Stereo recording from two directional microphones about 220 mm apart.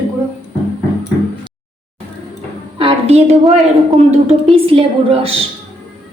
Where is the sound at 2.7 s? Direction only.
25° right (ahead or behind).